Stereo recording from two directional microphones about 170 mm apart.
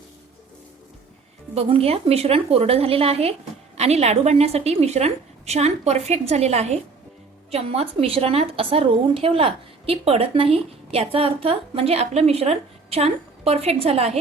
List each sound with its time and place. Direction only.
1.5 s a woman's voice: 35° right (ahead or behind)